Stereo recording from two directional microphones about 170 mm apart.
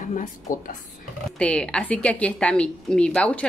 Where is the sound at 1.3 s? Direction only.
5° left (ahead or behind).